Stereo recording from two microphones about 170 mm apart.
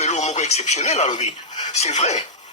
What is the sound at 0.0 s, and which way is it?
Speech, 40° left (ahead or behind).